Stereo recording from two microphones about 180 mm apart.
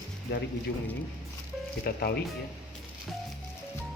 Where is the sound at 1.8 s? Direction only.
60° left (ahead or behind).